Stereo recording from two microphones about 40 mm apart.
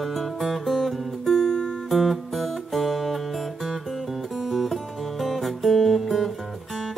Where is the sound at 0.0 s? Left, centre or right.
Centre.